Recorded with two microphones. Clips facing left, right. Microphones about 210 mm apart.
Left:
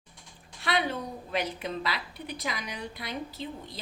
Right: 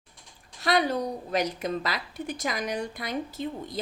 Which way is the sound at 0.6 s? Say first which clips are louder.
Right 5 dB; 40° right (ahead or behind).